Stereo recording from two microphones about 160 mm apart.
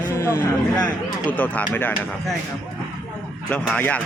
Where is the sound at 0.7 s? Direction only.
5° left (ahead or behind).